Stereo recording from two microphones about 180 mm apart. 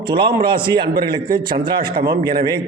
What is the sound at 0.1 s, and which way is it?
A man's voice, 25° right (ahead or behind).